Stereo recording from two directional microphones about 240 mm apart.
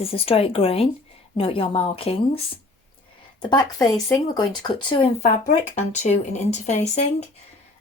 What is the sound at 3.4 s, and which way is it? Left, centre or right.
Speech, centre.